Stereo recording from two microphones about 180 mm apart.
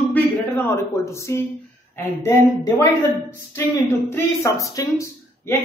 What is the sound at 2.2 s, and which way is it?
Speech, 15° left (ahead or behind).